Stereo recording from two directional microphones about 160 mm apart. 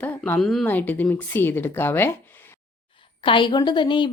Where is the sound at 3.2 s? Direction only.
30° left (ahead or behind).